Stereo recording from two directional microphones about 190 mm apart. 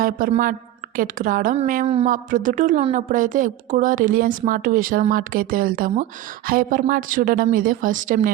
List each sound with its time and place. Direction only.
0.0 s a woman's voice: 45° right (ahead or behind)
1.5 s a sound: 40° right (ahead or behind)
2.0 s a woman's voice: 45° right (ahead or behind)